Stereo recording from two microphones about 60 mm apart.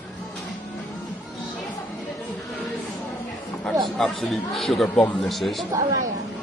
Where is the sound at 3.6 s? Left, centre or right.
Centre.